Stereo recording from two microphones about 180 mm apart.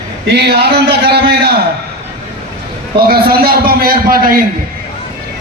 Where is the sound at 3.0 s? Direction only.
60° right (ahead or behind).